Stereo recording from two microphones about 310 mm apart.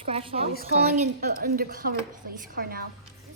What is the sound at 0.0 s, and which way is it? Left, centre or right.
Speech, centre.